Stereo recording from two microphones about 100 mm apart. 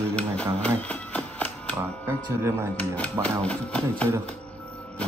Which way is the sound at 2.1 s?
25° right (ahead or behind).